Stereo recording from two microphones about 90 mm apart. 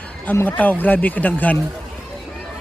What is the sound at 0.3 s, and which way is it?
Speech, 20° left (ahead or behind).